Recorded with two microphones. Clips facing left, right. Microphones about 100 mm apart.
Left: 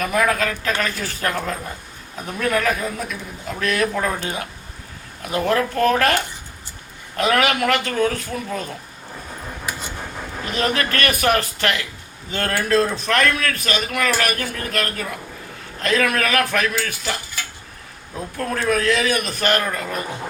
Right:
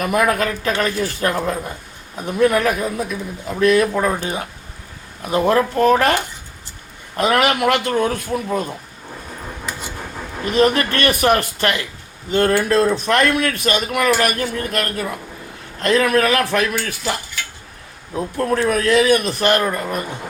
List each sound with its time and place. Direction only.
0.0 s a man's voice: 20° right (ahead or behind)
7.2 s a man's voice: 25° right (ahead or behind)
10.5 s a man's voice: 25° right (ahead or behind)